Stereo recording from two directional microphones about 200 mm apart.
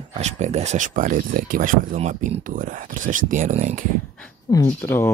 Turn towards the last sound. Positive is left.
turn(degrees=10)  # may be behind; listen again after turning